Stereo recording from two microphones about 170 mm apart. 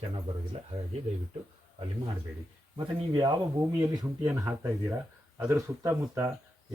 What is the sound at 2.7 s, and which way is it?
Speech, 25° right (ahead or behind).